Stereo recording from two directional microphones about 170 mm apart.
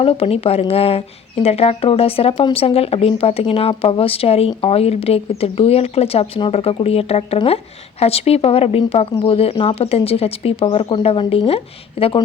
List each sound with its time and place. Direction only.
0.0 s speech: 35° left (ahead or behind)